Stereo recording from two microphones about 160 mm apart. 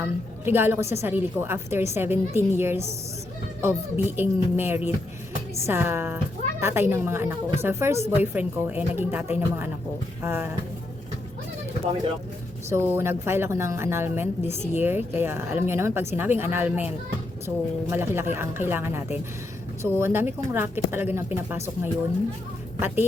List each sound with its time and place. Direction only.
0.0 s a woman's voice: 15° right (ahead or behind)
12.7 s a woman's voice: 15° right (ahead or behind)